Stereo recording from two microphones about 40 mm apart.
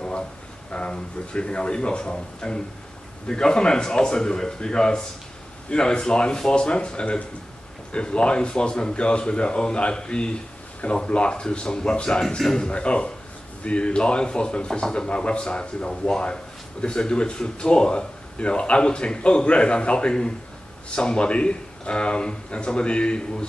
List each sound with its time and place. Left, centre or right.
0.7 s speech: left